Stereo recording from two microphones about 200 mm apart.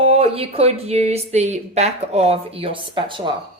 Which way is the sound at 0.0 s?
30° right (ahead or behind).